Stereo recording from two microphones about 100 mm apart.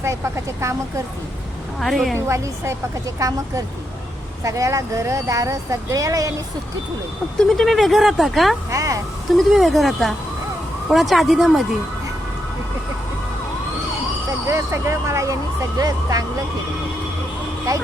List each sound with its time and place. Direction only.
0.0 s speech: 30° right (ahead or behind)
1.8 s speech: centre (ahead or behind)
2.1 s speech: 25° right (ahead or behind)
7.3 s speech: 5° left (ahead or behind)
8.7 s speech: 35° right (ahead or behind)
9.3 s speech: centre (ahead or behind)
14.4 s speech: 30° right (ahead or behind)
17.7 s speech: 35° right (ahead or behind)